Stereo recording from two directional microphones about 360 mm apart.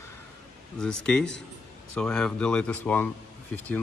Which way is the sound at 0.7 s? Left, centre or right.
Centre.